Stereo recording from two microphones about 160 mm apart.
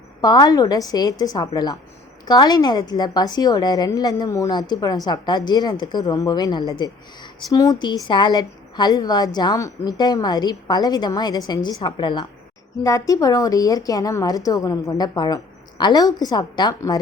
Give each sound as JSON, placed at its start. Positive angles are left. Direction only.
{"t": 0.2, "sound": "a woman's voice", "side_deg": 25}